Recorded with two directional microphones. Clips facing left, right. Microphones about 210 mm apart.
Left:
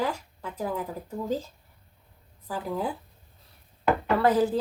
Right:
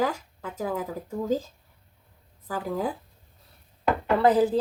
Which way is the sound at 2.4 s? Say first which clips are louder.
Right 1 dB; 45° right (ahead or behind).